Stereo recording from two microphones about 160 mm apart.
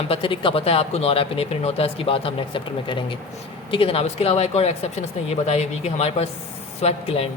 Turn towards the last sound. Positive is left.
turn(degrees=40)  # may be behind; listen again after turning